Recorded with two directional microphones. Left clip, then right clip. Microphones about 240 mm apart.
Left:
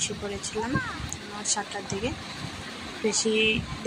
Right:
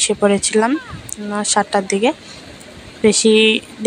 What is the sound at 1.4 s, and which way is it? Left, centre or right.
A woman's voice, right.